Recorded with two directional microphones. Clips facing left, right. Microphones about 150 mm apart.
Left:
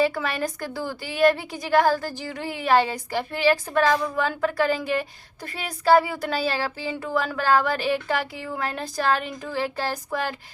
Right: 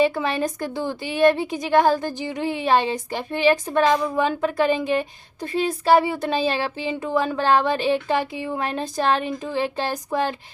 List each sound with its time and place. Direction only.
0.0 s a woman's voice: 20° right (ahead or behind)